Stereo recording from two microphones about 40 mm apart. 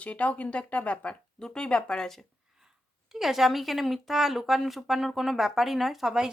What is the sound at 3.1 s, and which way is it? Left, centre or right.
Speech, centre.